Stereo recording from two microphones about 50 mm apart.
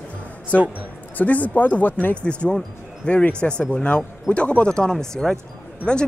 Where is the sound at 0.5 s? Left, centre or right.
Left.